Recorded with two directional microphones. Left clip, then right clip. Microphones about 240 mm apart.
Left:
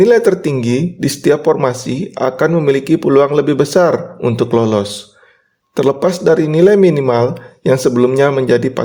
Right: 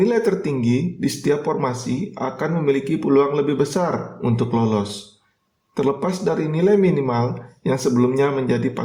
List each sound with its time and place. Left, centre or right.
0.0 s speech: left